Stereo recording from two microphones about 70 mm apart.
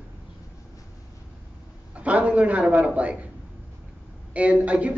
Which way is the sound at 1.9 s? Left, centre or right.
Centre.